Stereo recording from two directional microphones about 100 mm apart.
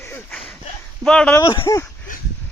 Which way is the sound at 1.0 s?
10° left (ahead or behind).